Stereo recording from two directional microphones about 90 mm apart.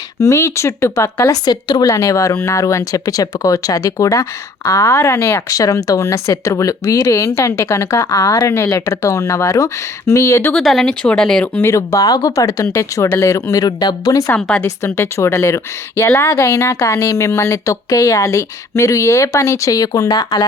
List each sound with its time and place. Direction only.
0.2 s speech: 35° left (ahead or behind)
1.5 s a woman's voice: 50° left (ahead or behind)
1.9 s speech: 35° left (ahead or behind)
10.5 s speech: 5° left (ahead or behind)
11.6 s speech: 35° left (ahead or behind)
14.3 s speech: 10° left (ahead or behind)
14.8 s speech: 30° left (ahead or behind); by 20.5 s 50° left (ahead or behind)